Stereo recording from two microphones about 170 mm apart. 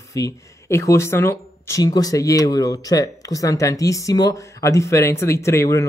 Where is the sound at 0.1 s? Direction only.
20° left (ahead or behind).